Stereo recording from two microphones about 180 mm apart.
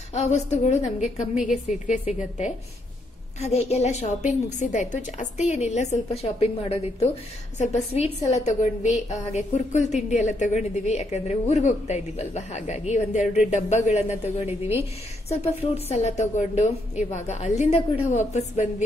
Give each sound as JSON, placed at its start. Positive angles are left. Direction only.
{"t": 0.1, "sound": "a woman's voice", "side_deg": 40}
{"t": 1.3, "sound": "a woman's voice", "side_deg": -5}
{"t": 1.9, "sound": "a woman's voice", "side_deg": 40}